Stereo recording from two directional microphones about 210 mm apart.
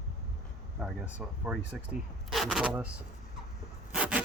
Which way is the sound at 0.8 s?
5° right (ahead or behind).